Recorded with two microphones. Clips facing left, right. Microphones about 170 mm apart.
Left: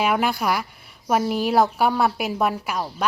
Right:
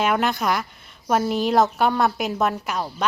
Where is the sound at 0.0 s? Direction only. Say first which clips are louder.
Even; 5° left (ahead or behind).